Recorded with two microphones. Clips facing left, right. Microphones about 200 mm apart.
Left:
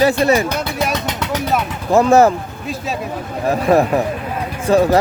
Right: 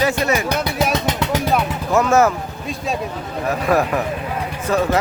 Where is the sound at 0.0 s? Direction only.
35° left (ahead or behind).